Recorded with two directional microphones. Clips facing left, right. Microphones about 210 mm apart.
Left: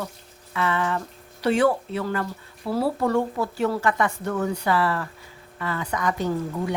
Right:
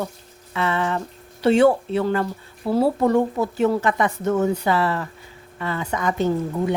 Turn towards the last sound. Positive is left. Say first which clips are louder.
# right 4 dB
turn(degrees=-25)  # may be behind; listen again after turning